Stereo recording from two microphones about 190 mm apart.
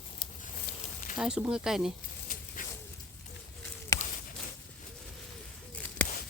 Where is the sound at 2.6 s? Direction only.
45° left (ahead or behind).